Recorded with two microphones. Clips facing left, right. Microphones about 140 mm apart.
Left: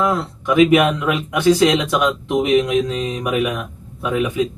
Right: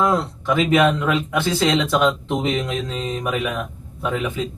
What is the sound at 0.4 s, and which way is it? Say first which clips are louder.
Speech: left 4 dB; 15° left (ahead or behind).